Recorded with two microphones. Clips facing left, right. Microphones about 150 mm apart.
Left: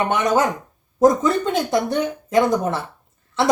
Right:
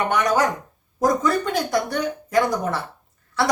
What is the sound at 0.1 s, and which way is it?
A child's voice, 25° left (ahead or behind).